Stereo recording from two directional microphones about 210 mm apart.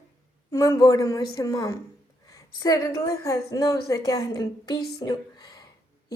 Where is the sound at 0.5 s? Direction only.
15° left (ahead or behind).